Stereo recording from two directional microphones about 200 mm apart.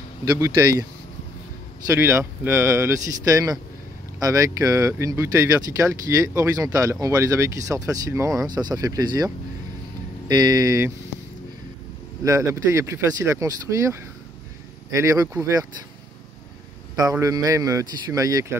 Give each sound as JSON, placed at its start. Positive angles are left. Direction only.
{"t": 0.2, "sound": "speech", "side_deg": -15}
{"t": 1.9, "sound": "speech", "side_deg": -15}
{"t": 12.2, "sound": "speech", "side_deg": -15}
{"t": 16.9, "sound": "speech", "side_deg": -15}